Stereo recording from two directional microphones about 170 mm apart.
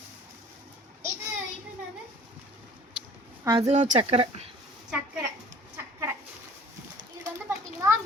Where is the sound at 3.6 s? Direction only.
45° right (ahead or behind).